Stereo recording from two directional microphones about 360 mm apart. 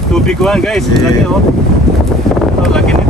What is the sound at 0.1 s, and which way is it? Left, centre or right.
Speech, centre.